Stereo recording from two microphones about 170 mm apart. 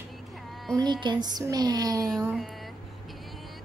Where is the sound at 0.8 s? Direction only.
25° right (ahead or behind).